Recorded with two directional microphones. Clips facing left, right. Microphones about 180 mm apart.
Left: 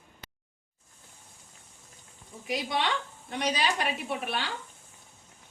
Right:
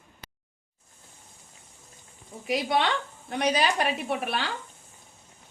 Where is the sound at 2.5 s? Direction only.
65° right (ahead or behind).